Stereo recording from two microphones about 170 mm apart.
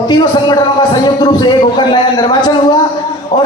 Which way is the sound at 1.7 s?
25° left (ahead or behind).